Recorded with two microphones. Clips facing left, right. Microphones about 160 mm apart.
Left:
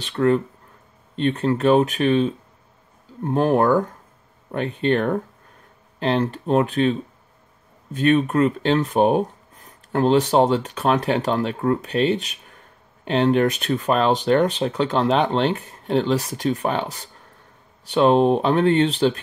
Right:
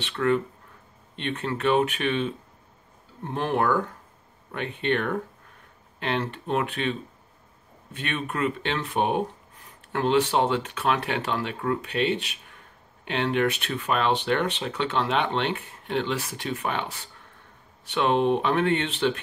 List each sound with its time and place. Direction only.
0.0 s speech: 35° left (ahead or behind)